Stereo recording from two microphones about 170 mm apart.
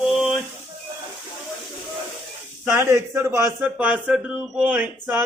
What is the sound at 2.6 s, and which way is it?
A man's voice, 15° right (ahead or behind).